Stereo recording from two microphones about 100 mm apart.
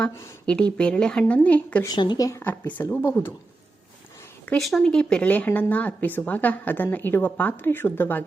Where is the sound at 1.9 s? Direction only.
45° left (ahead or behind).